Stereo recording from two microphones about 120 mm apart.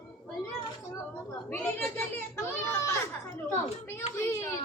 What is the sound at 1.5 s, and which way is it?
Children playing, 15° left (ahead or behind).